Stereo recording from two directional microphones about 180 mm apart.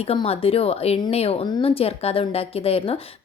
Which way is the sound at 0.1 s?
35° left (ahead or behind).